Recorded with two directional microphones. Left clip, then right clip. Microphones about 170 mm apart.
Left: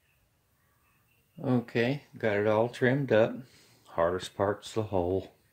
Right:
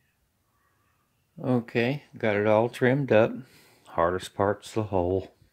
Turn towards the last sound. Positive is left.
turn(degrees=-35)  # may be behind; listen again after turning